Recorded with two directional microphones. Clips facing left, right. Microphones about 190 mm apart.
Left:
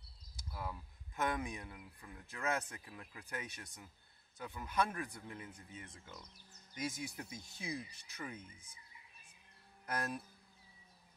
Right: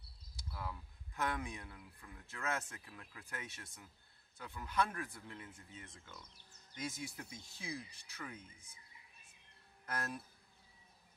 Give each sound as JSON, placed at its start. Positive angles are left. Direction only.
{"t": 0.5, "sound": "speech", "side_deg": 20}
{"t": 9.8, "sound": "speech", "side_deg": 15}